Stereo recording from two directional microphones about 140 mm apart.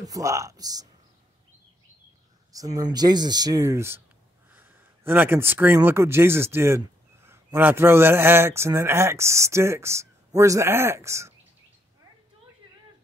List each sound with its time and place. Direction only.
0.0 s speech: 25° right (ahead or behind)
2.5 s speech: 25° right (ahead or behind)